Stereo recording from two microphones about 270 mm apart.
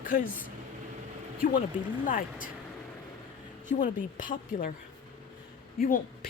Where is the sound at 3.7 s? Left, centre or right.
Left.